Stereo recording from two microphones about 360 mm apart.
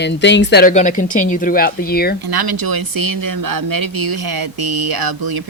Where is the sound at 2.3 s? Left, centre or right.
Right.